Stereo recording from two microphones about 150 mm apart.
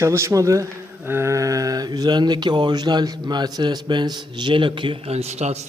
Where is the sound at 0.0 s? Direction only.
20° right (ahead or behind).